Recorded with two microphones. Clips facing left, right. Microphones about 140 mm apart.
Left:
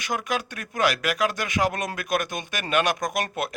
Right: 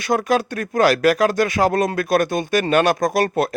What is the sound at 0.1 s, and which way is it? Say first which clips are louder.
Speech: right 10 dB; 35° right (ahead or behind).